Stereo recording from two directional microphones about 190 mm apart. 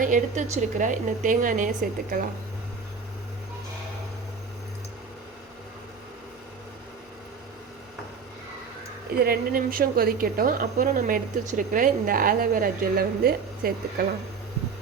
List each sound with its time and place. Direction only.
0.0 s a woman's voice: 45° right (ahead or behind)
9.1 s a woman's voice: 50° right (ahead or behind)